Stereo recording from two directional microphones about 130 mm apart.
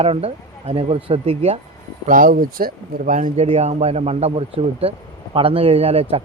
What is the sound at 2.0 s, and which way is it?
Speech, 90° right.